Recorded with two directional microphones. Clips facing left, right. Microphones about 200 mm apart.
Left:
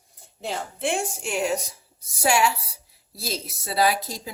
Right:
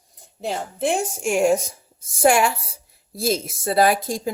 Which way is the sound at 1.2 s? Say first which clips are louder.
Right 7 dB; 45° right (ahead or behind).